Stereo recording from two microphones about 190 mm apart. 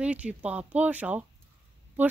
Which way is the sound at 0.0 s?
5° right (ahead or behind).